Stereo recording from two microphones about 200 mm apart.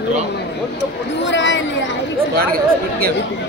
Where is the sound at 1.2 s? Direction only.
65° left (ahead or behind).